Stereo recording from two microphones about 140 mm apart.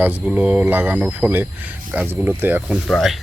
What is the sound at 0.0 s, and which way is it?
Speech, 10° right (ahead or behind).